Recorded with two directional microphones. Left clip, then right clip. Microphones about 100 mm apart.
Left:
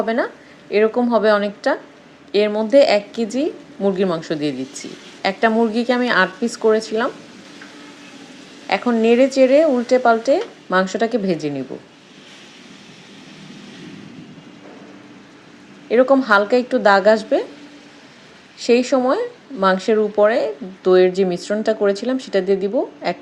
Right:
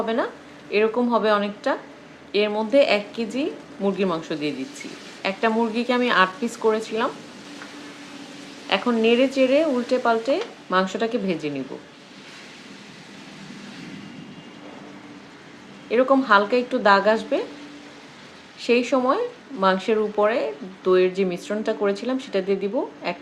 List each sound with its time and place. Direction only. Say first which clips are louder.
0.0 s speech: left 4 dB; 50° left (ahead or behind)
8.7 s speech: left 4 dB; 45° left (ahead or behind)
15.9 s speech: left 4 dB; 50° left (ahead or behind)
18.6 s speech: left 4 dB; 50° left (ahead or behind)